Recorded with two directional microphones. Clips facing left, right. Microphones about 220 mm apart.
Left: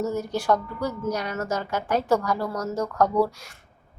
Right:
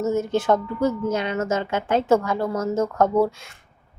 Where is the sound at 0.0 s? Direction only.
25° right (ahead or behind).